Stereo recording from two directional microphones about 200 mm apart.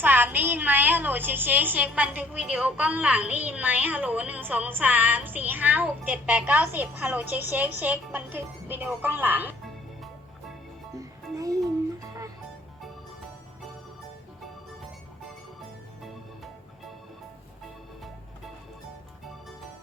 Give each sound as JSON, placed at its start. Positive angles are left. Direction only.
{"t": 0.0, "sound": "a woman's voice", "side_deg": -10}
{"t": 10.9, "sound": "music", "side_deg": -15}